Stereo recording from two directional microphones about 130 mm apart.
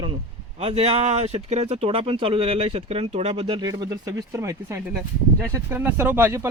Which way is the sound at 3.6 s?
30° right (ahead or behind).